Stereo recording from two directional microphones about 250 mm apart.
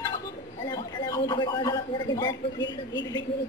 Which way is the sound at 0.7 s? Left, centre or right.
Centre.